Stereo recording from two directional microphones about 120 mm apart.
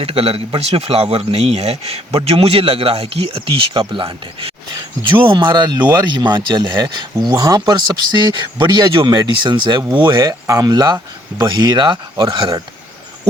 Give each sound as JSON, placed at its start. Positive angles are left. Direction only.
{"t": 0.0, "sound": "speech", "side_deg": -55}
{"t": 10.4, "sound": "speech", "side_deg": -30}